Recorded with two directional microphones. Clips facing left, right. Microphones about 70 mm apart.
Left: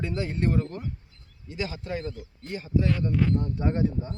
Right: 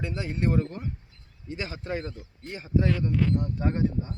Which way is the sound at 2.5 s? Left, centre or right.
Right.